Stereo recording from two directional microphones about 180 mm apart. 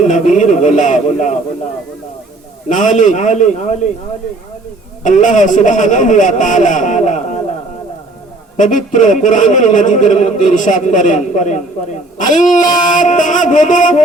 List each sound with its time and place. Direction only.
0.0 s a man's voice: 40° left (ahead or behind)
2.6 s a man's voice: 45° left (ahead or behind)
5.0 s a man's voice: 45° left (ahead or behind)
8.5 s a man's voice: 45° left (ahead or behind)